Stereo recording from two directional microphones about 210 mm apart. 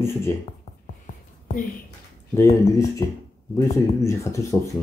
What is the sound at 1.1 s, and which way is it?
Whispering, 35° left (ahead or behind).